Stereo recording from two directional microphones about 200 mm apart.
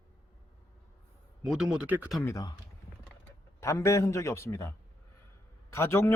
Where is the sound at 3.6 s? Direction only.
15° left (ahead or behind).